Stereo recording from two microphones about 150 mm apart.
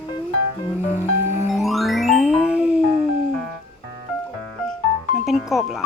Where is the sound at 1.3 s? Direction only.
15° right (ahead or behind).